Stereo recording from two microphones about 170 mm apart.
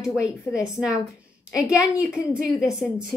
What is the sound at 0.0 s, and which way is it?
A woman's voice, 5° right (ahead or behind).